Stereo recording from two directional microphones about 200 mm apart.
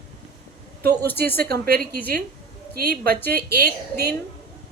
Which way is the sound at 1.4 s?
50° right (ahead or behind).